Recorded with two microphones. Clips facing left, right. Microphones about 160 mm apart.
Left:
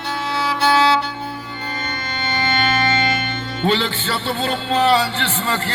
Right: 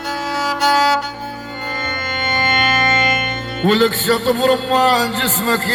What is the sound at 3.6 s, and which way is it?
A man's voice, 45° right (ahead or behind).